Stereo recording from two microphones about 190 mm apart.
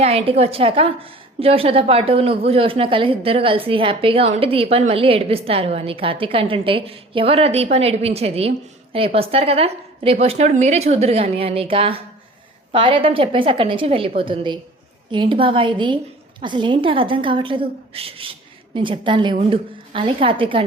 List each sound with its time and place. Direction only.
0.0 s a woman's voice: 30° right (ahead or behind)